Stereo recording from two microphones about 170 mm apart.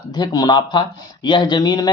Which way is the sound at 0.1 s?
25° left (ahead or behind).